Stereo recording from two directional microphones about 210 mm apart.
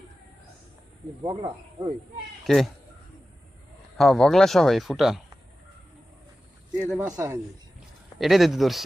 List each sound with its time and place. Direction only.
1.2 s speech: 20° right (ahead or behind)
2.4 s speech: centre (ahead or behind)
3.9 s speech: centre (ahead or behind)
6.9 s speech: 10° right (ahead or behind)